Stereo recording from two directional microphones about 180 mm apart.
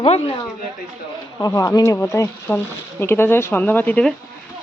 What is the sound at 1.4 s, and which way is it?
Speech, 20° left (ahead or behind).